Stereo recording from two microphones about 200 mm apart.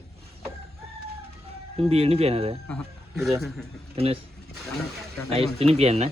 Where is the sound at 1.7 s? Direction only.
30° right (ahead or behind).